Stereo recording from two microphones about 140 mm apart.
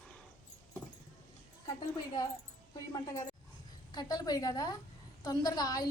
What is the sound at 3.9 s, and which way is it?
A woman's voice, 30° left (ahead or behind).